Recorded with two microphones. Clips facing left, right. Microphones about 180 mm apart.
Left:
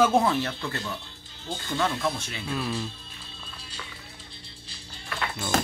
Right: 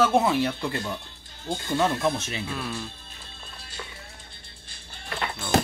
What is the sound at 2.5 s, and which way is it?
Speech, centre (ahead or behind).